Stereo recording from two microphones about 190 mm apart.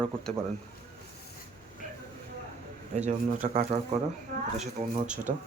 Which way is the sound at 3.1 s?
40° right (ahead or behind).